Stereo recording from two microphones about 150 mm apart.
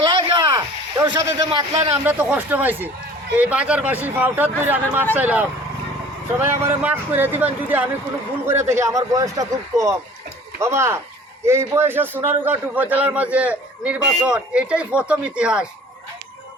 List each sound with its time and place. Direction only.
0.0 s a sound: 30° right (ahead or behind)
1.5 s a man's voice: 40° right (ahead or behind)
2.0 s a man's voice: 10° right (ahead or behind)